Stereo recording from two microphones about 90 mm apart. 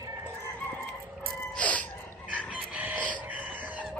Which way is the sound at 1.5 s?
15° left (ahead or behind).